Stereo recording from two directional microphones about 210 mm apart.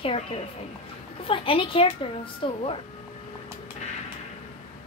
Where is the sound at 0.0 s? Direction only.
25° left (ahead or behind).